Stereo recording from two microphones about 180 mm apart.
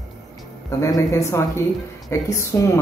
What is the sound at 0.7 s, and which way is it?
Speech, 15° left (ahead or behind).